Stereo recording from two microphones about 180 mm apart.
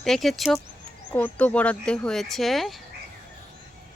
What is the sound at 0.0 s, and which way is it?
Speech, centre (ahead or behind).